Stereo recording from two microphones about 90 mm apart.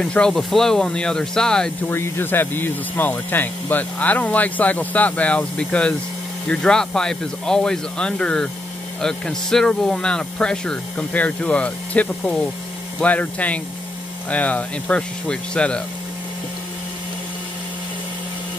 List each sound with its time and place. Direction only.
0.0 s speech: 10° left (ahead or behind)
1.9 s speech: 25° left (ahead or behind)